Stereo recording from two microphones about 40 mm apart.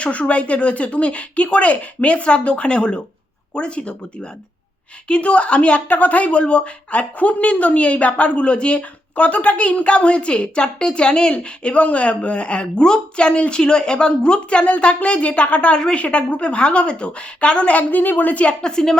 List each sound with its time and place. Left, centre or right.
0.0 s a woman's voice: left
5.9 s a woman's voice: left; by 13.3 s centre
13.3 s a woman's voice: left
13.6 s a woman's voice: left
18.6 s a woman's voice: centre